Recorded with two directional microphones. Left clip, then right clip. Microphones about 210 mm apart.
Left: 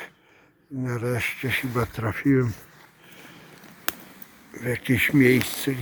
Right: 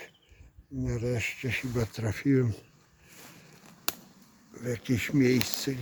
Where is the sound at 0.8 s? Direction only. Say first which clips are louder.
Left 5 dB; centre (ahead or behind).